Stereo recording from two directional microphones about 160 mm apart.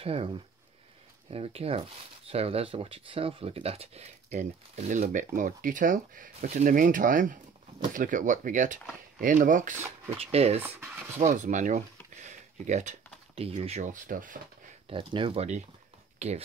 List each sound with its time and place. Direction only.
0.0 s speech: 35° right (ahead or behind); by 9.8 s 55° right (ahead or behind)
10.1 s speech: 40° right (ahead or behind)
11.3 s speech: 50° right (ahead or behind)
12.2 s a sound: 50° right (ahead or behind)
13.4 s speech: 40° right (ahead or behind); by 14.4 s 55° right (ahead or behind)
14.9 s speech: 30° right (ahead or behind)